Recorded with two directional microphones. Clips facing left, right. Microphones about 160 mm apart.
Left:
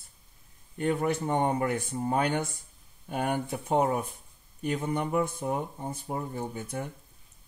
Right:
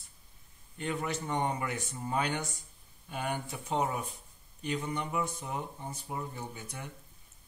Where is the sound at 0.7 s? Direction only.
50° left (ahead or behind).